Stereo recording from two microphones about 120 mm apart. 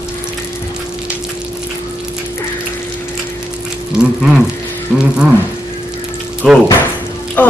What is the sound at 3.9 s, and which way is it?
A man's voice, 5° right (ahead or behind).